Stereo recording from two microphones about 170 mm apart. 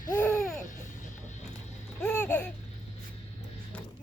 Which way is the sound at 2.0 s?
10° left (ahead or behind).